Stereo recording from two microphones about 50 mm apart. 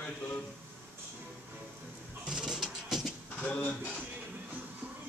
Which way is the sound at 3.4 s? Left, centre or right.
Left.